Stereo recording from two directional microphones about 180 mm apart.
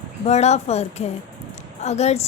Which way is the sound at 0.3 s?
35° left (ahead or behind).